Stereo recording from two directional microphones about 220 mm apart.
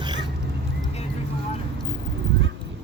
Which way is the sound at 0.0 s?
20° right (ahead or behind).